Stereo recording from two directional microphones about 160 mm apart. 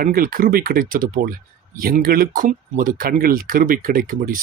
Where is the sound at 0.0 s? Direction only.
65° right (ahead or behind).